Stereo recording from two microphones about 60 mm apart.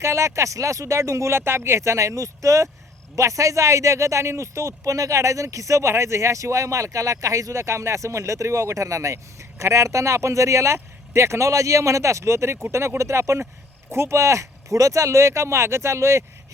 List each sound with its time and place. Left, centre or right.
0.0 s a man's voice: right